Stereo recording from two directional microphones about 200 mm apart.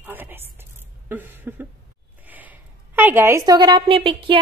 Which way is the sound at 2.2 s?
10° right (ahead or behind).